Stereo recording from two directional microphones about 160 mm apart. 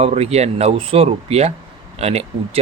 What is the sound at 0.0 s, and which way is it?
Speech, 40° right (ahead or behind).